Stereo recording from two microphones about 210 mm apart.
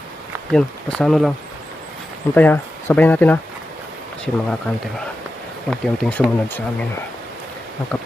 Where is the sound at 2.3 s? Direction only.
10° left (ahead or behind).